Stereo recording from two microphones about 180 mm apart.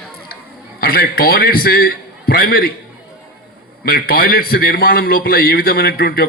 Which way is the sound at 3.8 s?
55° left (ahead or behind).